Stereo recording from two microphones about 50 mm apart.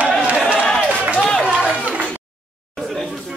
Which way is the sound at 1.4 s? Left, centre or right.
Right.